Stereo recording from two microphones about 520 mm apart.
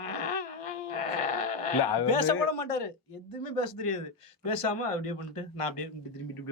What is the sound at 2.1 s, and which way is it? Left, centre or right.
A man's voice, left.